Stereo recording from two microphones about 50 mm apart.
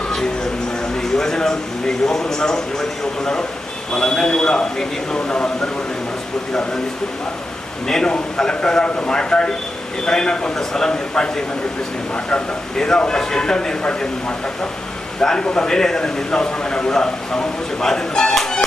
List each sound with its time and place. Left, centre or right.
0.9 s a sound: centre
2.0 s a man's voice: centre
3.9 s a man's voice: centre
7.9 s a man's voice: centre
15.2 s a man's voice: centre